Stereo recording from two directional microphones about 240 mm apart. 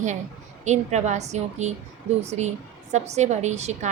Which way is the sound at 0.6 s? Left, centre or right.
Right.